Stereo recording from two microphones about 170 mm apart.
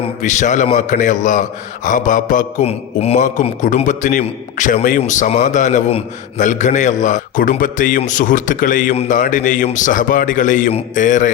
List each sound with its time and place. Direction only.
0.2 s a man's voice: 45° left (ahead or behind)